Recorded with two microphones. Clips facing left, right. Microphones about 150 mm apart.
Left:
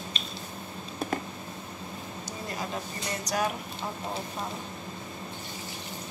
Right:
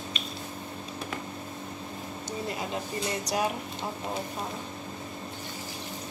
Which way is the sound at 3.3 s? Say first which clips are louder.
Left 1 dB; 25° right (ahead or behind).